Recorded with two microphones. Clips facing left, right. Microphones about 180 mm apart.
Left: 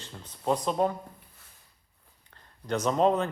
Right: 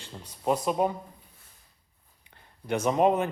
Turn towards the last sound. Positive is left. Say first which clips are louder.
# right 1 dB
turn(degrees=-10)  # may be behind; listen again after turning